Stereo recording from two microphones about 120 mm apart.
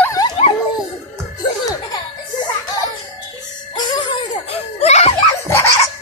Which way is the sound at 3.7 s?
35° left (ahead or behind).